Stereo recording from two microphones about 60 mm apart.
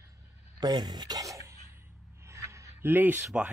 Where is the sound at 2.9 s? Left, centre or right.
Right.